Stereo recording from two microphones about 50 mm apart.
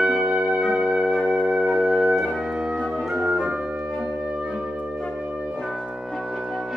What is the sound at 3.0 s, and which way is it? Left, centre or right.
Organ, centre.